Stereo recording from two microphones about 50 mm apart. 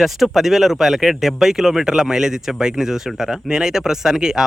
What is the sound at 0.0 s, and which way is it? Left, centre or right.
Speech, centre.